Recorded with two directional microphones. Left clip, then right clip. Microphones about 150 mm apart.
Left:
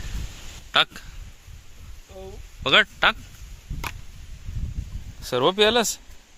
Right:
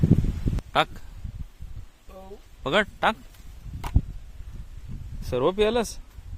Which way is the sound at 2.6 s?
15° right (ahead or behind).